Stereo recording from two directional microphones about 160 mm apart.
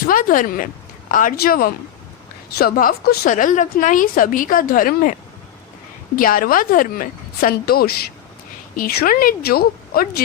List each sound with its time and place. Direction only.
0.1 s a woman's voice: 60° left (ahead or behind)
6.1 s a woman's voice: 65° left (ahead or behind)
8.7 s a woman's voice: 60° left (ahead or behind)